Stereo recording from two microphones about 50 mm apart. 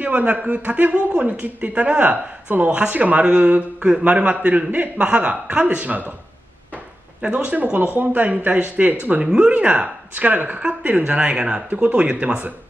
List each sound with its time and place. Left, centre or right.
0.0 s speech: right
6.7 s a sound: right
8.0 s speech: right